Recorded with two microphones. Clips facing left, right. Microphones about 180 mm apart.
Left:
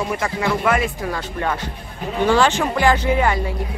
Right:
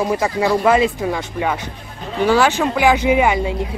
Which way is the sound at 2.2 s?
10° right (ahead or behind).